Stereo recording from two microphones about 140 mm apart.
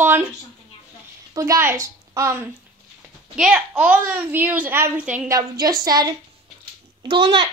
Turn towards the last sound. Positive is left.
turn(degrees=-40)  # may be behind; listen again after turning